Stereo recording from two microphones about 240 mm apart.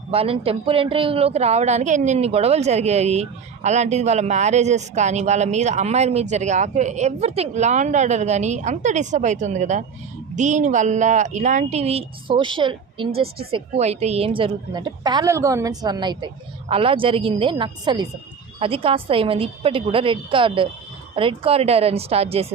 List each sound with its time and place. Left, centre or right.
0.1 s a woman's voice: right